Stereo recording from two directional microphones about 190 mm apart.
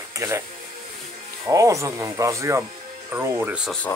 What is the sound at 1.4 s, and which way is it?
Speech, 15° right (ahead or behind).